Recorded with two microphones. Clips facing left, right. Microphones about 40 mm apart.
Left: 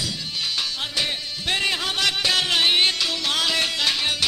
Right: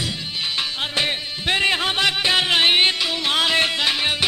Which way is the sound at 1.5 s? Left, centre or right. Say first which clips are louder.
Right 4 dB; right.